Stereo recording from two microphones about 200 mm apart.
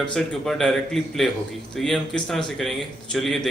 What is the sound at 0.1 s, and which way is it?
A man's voice, centre (ahead or behind).